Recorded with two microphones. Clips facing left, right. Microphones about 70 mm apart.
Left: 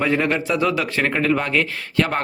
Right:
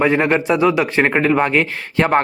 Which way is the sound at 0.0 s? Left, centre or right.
Right.